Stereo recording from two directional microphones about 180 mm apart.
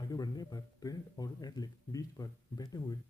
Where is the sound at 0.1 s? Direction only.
20° left (ahead or behind).